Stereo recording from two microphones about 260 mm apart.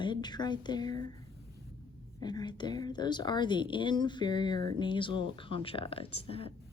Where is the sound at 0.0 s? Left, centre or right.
Centre.